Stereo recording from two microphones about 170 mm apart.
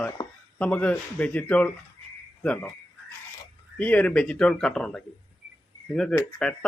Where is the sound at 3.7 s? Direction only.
10° left (ahead or behind).